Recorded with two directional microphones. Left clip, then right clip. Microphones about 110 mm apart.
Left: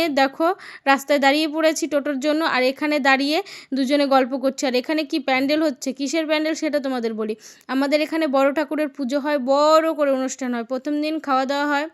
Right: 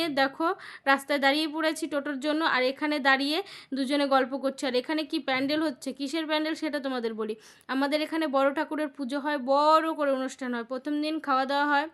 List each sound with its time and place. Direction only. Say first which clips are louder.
0.0 s a woman's voice: left 7 dB; 35° left (ahead or behind)